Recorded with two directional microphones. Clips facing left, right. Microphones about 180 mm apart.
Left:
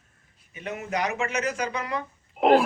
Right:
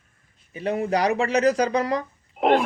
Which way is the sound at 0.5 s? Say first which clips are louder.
Right 7 dB; 35° right (ahead or behind).